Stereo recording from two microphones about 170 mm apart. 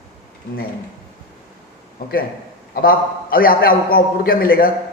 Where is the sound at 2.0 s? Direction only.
65° left (ahead or behind).